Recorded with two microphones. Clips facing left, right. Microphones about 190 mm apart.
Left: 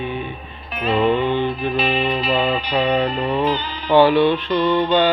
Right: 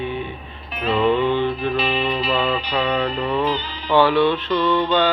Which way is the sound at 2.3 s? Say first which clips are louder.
Left 2 dB; 10° left (ahead or behind).